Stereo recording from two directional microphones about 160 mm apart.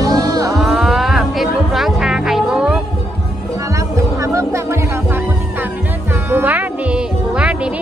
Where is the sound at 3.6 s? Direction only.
20° right (ahead or behind).